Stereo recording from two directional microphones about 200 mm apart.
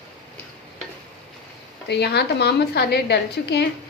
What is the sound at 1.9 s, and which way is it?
A woman's voice, 55° left (ahead or behind).